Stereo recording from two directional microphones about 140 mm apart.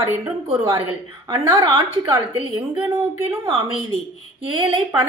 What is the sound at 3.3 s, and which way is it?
A woman's voice, 40° right (ahead or behind).